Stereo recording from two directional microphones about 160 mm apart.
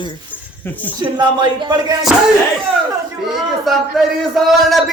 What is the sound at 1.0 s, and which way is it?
Speech, 25° right (ahead or behind).